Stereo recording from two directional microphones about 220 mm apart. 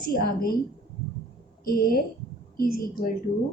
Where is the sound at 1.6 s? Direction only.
40° left (ahead or behind).